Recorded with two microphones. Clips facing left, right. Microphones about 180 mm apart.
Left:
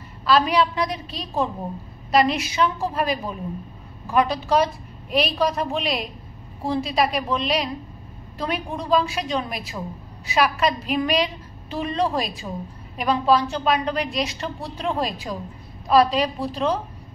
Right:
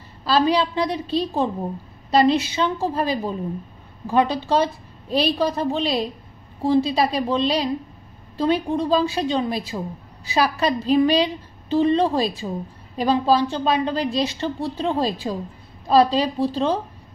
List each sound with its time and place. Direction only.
0.2 s a woman's voice: 30° right (ahead or behind)